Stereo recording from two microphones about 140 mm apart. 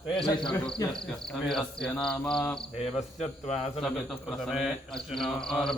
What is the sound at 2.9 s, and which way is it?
Speech, 55° left (ahead or behind).